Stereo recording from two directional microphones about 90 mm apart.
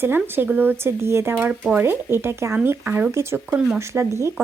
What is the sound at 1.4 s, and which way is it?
Speech, 15° right (ahead or behind).